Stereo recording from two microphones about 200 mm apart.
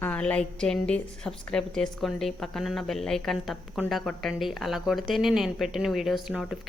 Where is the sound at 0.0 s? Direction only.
5° left (ahead or behind).